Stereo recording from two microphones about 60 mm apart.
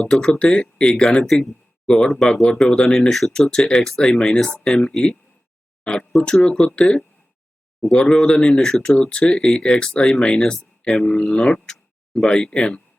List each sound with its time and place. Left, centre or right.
0.0 s speech: centre
11.0 s speech: centre